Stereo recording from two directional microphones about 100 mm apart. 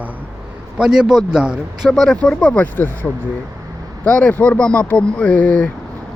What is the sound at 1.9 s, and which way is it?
Speech, 5° left (ahead or behind).